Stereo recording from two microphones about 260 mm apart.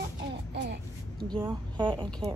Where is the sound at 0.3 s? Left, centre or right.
Right.